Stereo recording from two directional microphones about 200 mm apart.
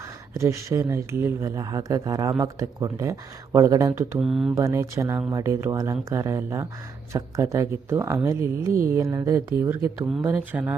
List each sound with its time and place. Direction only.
0.3 s speech: 15° right (ahead or behind)
4.2 s speech: centre (ahead or behind)
4.5 s speech: 15° right (ahead or behind)